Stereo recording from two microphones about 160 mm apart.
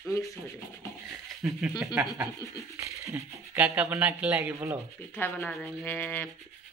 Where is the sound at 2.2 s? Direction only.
20° right (ahead or behind).